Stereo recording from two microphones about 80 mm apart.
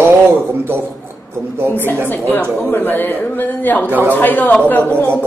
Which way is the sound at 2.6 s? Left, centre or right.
Left.